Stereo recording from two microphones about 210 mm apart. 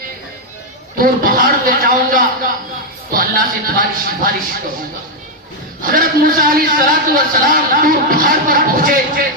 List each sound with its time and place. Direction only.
0.9 s a man's voice: 40° right (ahead or behind)
5.8 s a man's voice: 40° right (ahead or behind)